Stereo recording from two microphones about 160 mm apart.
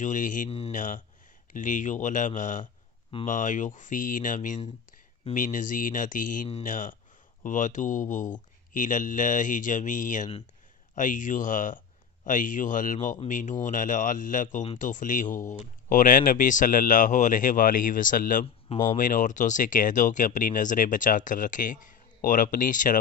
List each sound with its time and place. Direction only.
0.0 s speech: 55° left (ahead or behind)